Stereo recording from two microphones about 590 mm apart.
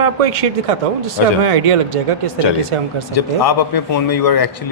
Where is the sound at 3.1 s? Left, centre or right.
Left.